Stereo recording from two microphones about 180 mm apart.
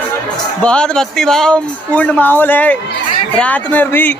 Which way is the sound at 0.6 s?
5° left (ahead or behind).